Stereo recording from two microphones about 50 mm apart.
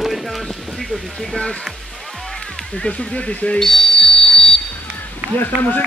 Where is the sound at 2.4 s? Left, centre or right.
Centre.